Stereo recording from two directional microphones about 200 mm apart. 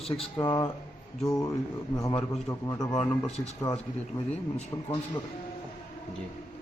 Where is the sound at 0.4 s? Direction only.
15° left (ahead or behind).